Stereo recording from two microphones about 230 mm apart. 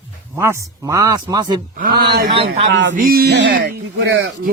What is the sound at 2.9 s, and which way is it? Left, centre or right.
Speech, right.